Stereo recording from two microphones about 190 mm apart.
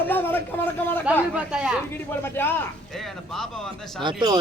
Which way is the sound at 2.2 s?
10° left (ahead or behind).